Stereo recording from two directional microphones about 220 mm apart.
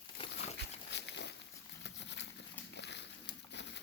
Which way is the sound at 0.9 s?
50° left (ahead or behind).